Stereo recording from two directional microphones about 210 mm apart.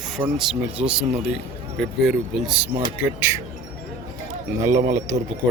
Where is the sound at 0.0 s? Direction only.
Centre (ahead or behind).